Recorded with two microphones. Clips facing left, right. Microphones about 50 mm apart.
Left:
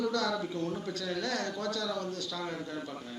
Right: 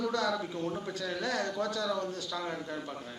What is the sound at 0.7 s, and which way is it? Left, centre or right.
A man's voice, centre.